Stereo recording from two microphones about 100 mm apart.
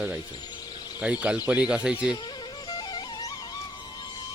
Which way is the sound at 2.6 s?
45° left (ahead or behind).